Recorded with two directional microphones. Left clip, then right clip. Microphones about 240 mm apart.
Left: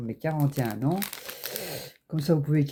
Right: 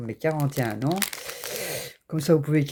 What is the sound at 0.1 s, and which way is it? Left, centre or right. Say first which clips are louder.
Speech: right 4 dB; right.